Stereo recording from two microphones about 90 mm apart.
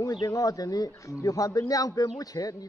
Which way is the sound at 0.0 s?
40° left (ahead or behind).